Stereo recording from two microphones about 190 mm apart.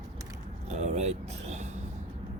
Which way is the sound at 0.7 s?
35° right (ahead or behind).